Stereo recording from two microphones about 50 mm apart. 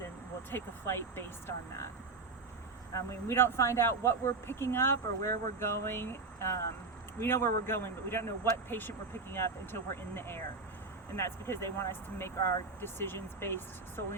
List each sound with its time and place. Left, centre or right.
0.5 s speech: left
3.1 s speech: left
7.2 s speech: left
8.7 s speech: left
9.4 s speech: left